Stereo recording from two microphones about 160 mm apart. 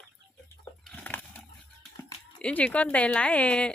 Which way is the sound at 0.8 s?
10° left (ahead or behind).